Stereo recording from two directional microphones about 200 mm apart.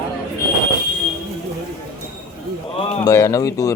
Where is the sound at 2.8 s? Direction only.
15° left (ahead or behind).